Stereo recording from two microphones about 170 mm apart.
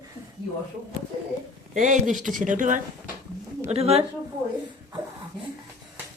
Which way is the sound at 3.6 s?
35° right (ahead or behind).